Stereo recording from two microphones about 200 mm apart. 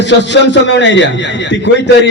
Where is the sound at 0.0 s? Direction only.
65° left (ahead or behind).